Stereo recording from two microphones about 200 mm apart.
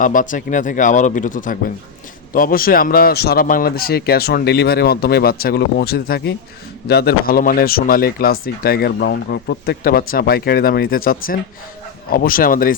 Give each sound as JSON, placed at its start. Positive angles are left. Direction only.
{"t": 0.0, "sound": "speech", "side_deg": 40}